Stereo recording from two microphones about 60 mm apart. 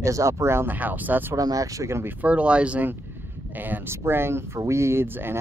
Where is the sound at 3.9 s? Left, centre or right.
Right.